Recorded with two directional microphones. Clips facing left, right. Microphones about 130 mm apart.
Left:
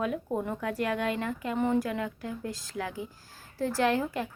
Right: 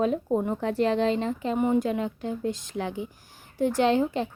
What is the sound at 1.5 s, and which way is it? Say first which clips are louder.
Speech: right 3 dB; 15° right (ahead or behind).